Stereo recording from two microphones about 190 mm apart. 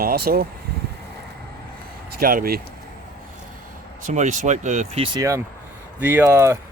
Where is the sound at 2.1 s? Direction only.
50° right (ahead or behind).